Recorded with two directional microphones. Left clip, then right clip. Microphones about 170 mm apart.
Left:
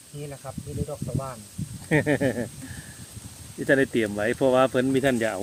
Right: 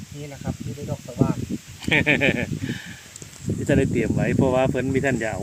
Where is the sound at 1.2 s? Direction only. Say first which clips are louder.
Right 10 dB; 20° left (ahead or behind).